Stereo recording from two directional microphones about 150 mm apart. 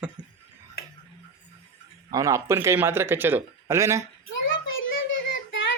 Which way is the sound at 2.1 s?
20° right (ahead or behind).